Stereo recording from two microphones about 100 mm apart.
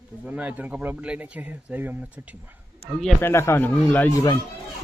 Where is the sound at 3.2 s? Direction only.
25° left (ahead or behind).